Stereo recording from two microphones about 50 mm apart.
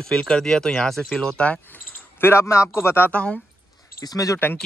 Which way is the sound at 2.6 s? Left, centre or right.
Left.